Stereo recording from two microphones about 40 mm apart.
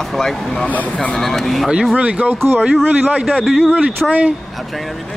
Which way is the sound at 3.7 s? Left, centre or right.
Right.